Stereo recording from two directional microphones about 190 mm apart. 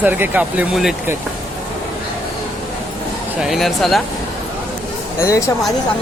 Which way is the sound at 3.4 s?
Centre (ahead or behind).